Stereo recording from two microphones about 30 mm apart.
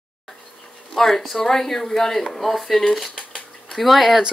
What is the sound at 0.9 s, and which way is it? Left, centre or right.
A woman's voice, centre.